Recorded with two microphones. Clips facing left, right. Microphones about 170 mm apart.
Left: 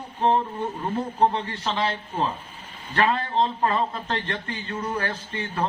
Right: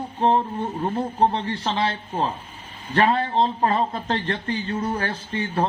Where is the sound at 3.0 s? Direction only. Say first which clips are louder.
Right 3 dB; 35° right (ahead or behind).